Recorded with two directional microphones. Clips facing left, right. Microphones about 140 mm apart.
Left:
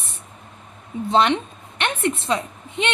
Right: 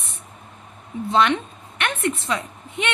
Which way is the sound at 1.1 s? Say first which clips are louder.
Left 1 dB; 30° left (ahead or behind).